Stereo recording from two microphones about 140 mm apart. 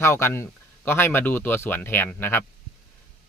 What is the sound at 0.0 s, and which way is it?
Speech, 20° left (ahead or behind).